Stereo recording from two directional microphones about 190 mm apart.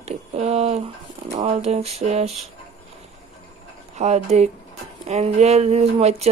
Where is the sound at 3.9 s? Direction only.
35° right (ahead or behind).